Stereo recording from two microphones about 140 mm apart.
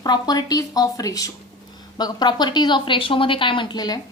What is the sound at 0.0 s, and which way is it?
A woman's voice, 30° left (ahead or behind).